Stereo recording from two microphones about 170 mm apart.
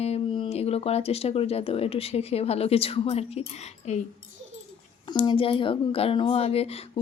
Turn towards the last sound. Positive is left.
turn(degrees=35)  # may be behind; listen again after turning